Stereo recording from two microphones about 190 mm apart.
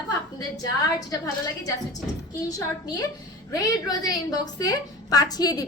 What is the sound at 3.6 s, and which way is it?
A woman's voice, 20° left (ahead or behind).